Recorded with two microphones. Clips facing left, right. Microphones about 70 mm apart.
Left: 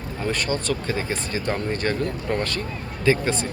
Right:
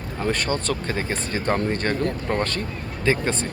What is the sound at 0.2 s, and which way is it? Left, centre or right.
Speech, right.